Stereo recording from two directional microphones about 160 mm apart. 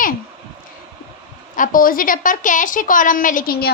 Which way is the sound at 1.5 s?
60° left (ahead or behind).